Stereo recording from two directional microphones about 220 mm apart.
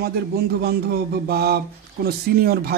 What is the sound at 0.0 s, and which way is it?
A man's voice, 45° right (ahead or behind).